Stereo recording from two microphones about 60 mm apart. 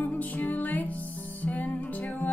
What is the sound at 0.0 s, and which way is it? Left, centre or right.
Music, left.